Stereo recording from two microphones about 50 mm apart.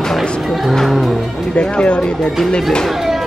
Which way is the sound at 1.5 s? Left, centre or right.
Left.